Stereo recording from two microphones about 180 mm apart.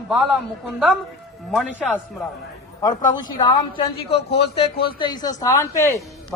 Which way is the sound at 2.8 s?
20° left (ahead or behind).